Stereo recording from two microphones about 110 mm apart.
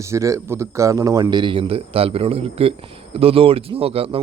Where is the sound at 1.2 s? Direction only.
45° right (ahead or behind).